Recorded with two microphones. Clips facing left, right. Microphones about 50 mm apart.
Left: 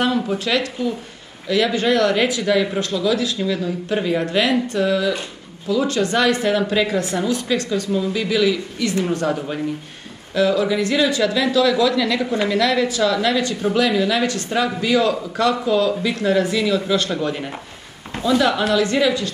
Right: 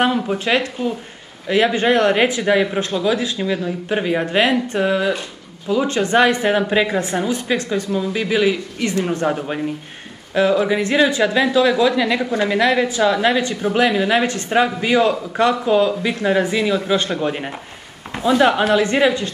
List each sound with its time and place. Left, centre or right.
0.0 s a man's voice: right